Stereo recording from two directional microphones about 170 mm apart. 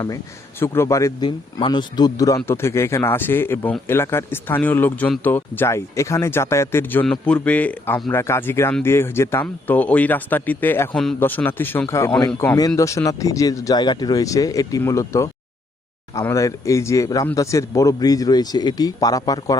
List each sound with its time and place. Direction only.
0.6 s speech: 15° left (ahead or behind)
12.5 s a man's voice: 20° left (ahead or behind)